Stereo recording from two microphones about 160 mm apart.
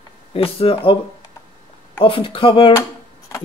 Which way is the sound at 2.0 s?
35° left (ahead or behind).